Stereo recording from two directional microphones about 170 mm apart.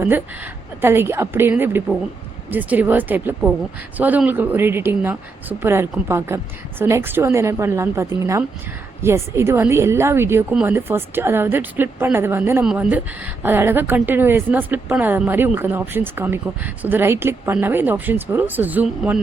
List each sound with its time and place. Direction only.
0.8 s a woman's voice: 15° right (ahead or behind)